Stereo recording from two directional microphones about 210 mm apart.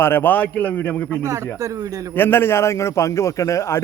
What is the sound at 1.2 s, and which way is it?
Speech, 15° right (ahead or behind).